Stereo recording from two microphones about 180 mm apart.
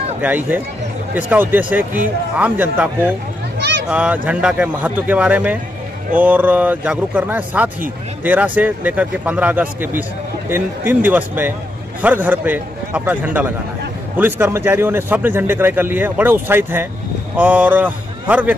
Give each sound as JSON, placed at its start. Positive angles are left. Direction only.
{"t": 0.2, "sound": "speech", "side_deg": -10}
{"t": 3.5, "sound": "a sound", "side_deg": -70}
{"t": 3.9, "sound": "speech", "side_deg": -5}